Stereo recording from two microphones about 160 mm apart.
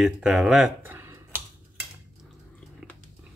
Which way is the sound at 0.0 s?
5° right (ahead or behind).